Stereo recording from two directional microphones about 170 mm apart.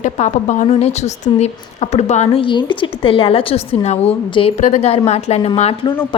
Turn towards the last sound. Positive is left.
turn(degrees=30)  # may be behind; listen again after turning